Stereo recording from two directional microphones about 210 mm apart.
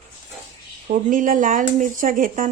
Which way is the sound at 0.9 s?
40° right (ahead or behind).